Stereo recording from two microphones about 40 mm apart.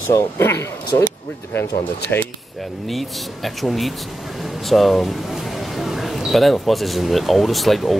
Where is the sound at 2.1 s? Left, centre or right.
Left.